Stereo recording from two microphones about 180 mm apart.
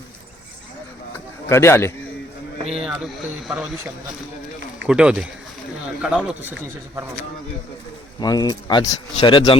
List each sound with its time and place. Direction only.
1.5 s a man's voice: 15° left (ahead or behind)
2.6 s speech: 5° right (ahead or behind)
4.9 s speech: 5° right (ahead or behind)
8.2 s speech: 20° left (ahead or behind)